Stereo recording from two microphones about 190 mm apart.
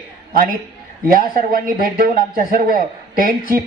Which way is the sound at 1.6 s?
45° right (ahead or behind).